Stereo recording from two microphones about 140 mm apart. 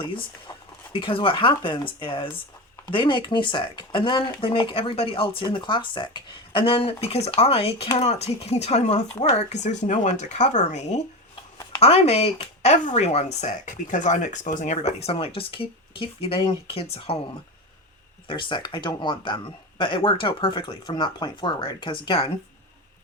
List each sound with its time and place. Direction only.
0.0 s speech: 35° left (ahead or behind)
18.3 s speech: 35° left (ahead or behind)